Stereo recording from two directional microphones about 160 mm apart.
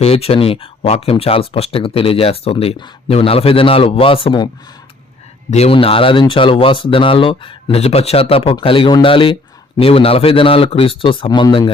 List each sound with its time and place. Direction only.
0.0 s speech: 40° left (ahead or behind)
5.5 s speech: 40° left (ahead or behind)